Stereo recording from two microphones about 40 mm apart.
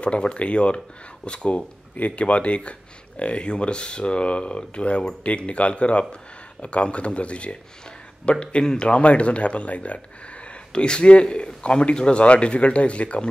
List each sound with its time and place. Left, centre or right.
0.0 s speech: left